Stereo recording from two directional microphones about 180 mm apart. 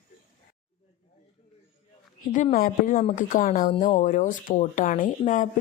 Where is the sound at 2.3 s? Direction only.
45° left (ahead or behind).